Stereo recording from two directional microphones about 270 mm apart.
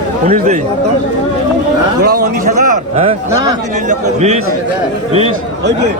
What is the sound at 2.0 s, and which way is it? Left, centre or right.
A man's voice, right.